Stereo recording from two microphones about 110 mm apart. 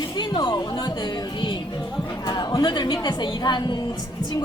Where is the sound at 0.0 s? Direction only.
40° left (ahead or behind).